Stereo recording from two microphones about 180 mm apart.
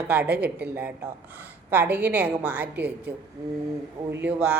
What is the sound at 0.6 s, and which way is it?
A woman's voice, 10° right (ahead or behind).